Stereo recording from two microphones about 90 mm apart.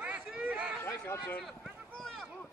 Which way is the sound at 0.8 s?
25° left (ahead or behind).